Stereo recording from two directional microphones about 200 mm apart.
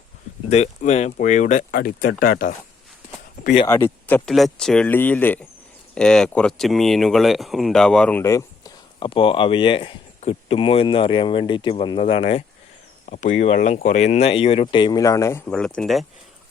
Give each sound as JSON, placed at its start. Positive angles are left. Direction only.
{"t": 0.5, "sound": "speech", "side_deg": 35}
{"t": 3.7, "sound": "speech", "side_deg": 10}
{"t": 13.1, "sound": "speech", "side_deg": 40}